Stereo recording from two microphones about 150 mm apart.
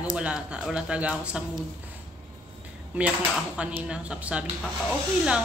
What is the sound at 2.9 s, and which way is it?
Speech, 10° right (ahead or behind).